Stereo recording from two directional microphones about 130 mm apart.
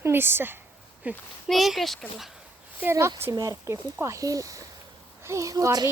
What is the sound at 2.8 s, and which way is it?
Speech, 20° right (ahead or behind).